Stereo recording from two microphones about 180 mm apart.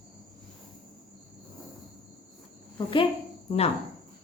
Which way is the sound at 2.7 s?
30° left (ahead or behind).